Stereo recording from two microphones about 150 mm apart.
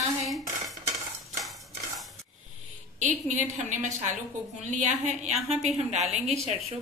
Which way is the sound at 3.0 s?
55° right (ahead or behind).